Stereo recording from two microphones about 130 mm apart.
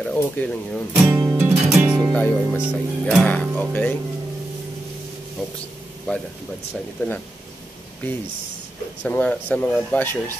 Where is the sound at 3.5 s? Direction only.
10° left (ahead or behind).